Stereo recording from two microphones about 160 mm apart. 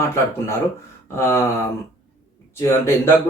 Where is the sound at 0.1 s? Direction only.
15° left (ahead or behind).